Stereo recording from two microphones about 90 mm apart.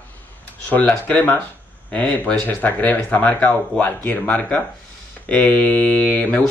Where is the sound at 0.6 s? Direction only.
15° left (ahead or behind).